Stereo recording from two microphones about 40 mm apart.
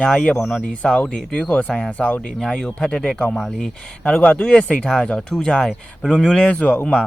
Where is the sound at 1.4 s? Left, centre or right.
Left.